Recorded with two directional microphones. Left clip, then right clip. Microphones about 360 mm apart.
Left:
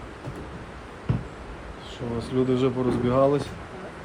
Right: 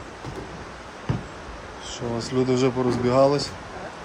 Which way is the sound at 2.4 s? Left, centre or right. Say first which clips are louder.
Right 2 dB; centre.